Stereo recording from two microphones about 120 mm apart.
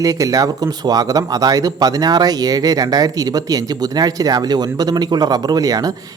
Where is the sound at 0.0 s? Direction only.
30° right (ahead or behind).